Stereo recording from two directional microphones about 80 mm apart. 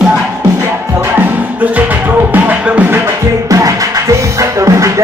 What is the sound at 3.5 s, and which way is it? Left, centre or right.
Music, right.